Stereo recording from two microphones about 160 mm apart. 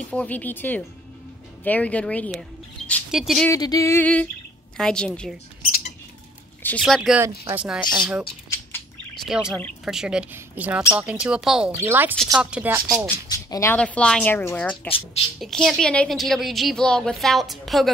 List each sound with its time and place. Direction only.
0.1 s music: 10° left (ahead or behind)
3.1 s a woman's voice: centre (ahead or behind)
3.4 s music: 20° left (ahead or behind)
4.7 s a woman's voice: 5° left (ahead or behind)
6.8 s a woman's voice: centre (ahead or behind)
9.1 s a sound: centre (ahead or behind)
9.8 s a woman's voice: 5° right (ahead or behind)
13.5 s speech: 20° left (ahead or behind)
13.7 s music: 5° left (ahead or behind)
14.9 s speech: 35° left (ahead or behind)
15.4 s a woman's voice: centre (ahead or behind)